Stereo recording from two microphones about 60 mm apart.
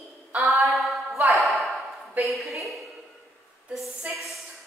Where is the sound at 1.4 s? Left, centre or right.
Centre.